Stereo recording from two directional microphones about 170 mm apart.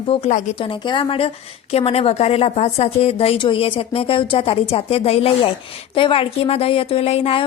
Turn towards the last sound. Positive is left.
turn(degrees=35)  # may be behind; listen again after turning